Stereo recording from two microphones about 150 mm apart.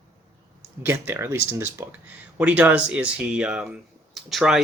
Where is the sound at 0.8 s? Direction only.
15° right (ahead or behind).